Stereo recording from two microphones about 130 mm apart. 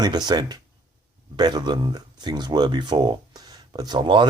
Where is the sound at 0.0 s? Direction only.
30° right (ahead or behind).